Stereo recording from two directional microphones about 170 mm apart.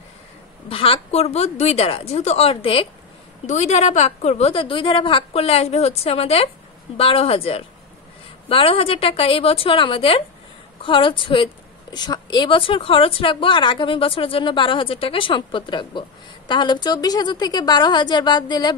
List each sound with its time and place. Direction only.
0.7 s a woman's voice: 35° left (ahead or behind)